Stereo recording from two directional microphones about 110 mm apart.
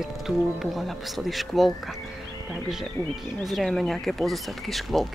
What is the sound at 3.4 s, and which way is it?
Speech, centre (ahead or behind).